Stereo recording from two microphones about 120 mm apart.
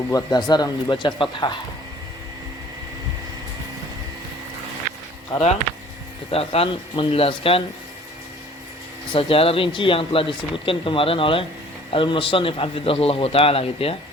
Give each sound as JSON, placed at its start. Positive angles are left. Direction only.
{"t": 0.1, "sound": "speech", "side_deg": 30}
{"t": 6.3, "sound": "speech", "side_deg": 55}
{"t": 9.1, "sound": "speech", "side_deg": 50}